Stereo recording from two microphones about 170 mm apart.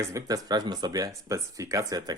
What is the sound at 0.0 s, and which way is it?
Speech, 20° right (ahead or behind).